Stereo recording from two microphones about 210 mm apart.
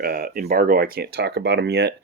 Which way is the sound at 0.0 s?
45° right (ahead or behind).